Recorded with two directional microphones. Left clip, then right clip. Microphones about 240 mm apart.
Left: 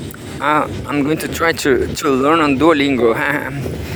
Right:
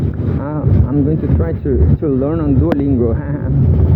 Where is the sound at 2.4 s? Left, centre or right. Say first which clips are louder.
Left 4 dB; left.